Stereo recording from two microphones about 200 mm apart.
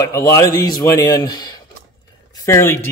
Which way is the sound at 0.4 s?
20° left (ahead or behind).